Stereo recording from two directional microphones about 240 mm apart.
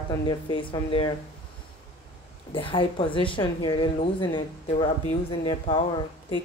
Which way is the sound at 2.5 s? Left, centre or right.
Left.